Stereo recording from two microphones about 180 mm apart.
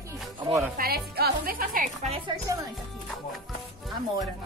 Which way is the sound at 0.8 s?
60° right (ahead or behind).